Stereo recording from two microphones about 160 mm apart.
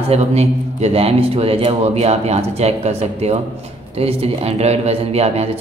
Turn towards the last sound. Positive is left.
turn(degrees=-40)  # may be behind; listen again after turning